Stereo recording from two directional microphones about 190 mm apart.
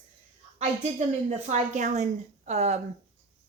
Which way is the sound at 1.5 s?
40° right (ahead or behind).